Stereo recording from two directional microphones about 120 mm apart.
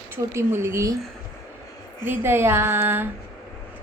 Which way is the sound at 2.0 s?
20° right (ahead or behind).